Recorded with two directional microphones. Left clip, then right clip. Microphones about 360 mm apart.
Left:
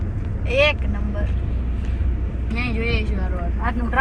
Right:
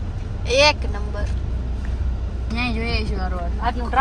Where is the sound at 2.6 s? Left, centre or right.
Right.